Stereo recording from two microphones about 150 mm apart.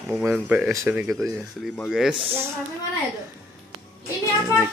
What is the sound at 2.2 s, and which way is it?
Speech, 40° right (ahead or behind).